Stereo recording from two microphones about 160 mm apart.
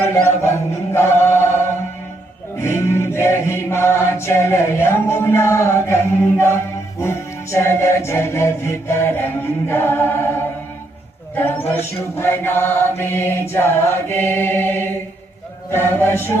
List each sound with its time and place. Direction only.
0.0 s chant: 15° left (ahead or behind)
12.1 s chant: 15° left (ahead or behind)